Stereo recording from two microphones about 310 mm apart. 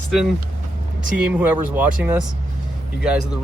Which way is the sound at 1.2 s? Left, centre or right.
Centre.